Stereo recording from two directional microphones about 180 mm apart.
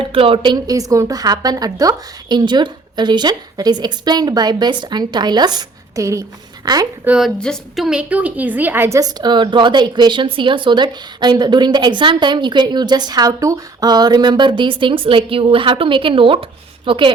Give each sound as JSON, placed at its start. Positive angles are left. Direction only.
{"t": 0.0, "sound": "a woman's voice", "side_deg": -30}
{"t": 7.0, "sound": "a woman's voice", "side_deg": -5}